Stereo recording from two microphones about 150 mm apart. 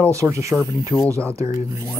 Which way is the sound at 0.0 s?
20° right (ahead or behind).